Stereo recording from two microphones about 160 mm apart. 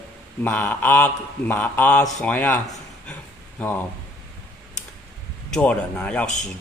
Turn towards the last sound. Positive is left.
turn(degrees=10)  # may be behind; listen again after turning